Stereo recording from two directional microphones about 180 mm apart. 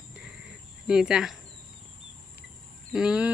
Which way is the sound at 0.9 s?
5° right (ahead or behind).